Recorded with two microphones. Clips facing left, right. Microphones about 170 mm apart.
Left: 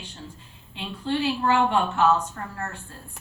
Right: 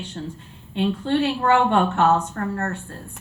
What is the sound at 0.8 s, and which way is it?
A woman's voice, 60° right (ahead or behind).